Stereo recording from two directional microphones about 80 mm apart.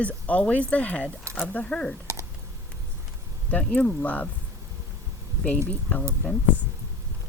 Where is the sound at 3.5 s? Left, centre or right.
Centre.